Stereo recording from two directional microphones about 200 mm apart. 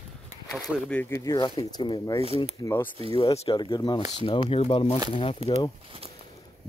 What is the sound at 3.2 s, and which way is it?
Speech, 30° left (ahead or behind).